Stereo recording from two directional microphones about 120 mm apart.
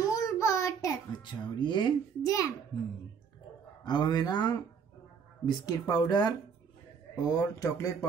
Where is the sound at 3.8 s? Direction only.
35° left (ahead or behind).